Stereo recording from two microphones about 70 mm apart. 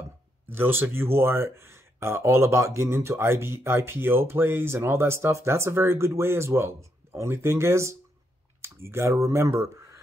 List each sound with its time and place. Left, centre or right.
0.5 s speech: right